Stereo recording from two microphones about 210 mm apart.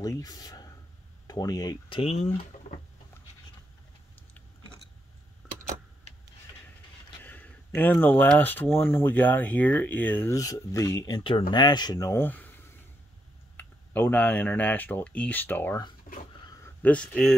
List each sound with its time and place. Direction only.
0.0 s speech: 15° left (ahead or behind)
7.2 s speech: 10° left (ahead or behind)
13.6 s speech: 10° left (ahead or behind)
16.4 s a sound: 10° left (ahead or behind)